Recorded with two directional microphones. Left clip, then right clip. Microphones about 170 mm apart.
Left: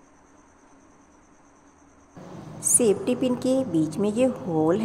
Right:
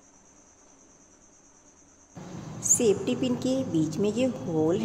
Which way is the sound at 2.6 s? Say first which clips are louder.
Left 2 dB; 20° left (ahead or behind).